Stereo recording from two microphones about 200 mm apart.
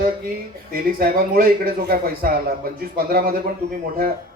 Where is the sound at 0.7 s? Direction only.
50° right (ahead or behind).